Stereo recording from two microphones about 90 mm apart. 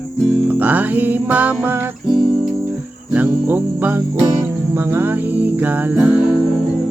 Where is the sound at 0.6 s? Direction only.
20° right (ahead or behind).